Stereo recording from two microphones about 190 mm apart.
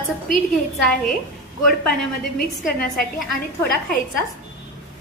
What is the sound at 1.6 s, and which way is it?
A woman's voice, centre (ahead or behind).